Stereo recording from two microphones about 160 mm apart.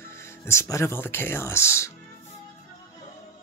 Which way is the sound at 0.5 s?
15° left (ahead or behind).